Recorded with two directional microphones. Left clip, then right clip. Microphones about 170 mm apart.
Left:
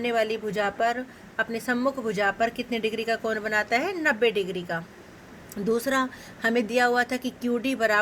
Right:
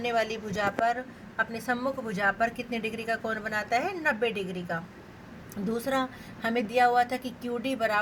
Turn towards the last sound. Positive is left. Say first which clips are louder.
# left 4 dB
turn(degrees=60)  # may be behind; listen again after turning